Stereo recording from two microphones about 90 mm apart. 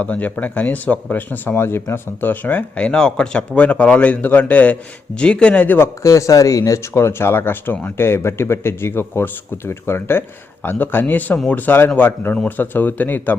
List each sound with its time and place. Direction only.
0.0 s speech: 15° left (ahead or behind)
6.0 s speech: 35° left (ahead or behind); by 13.3 s 20° left (ahead or behind)